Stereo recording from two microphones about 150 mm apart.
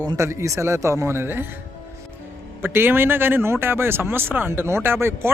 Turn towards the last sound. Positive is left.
turn(degrees=-15)  # may be behind; listen again after turning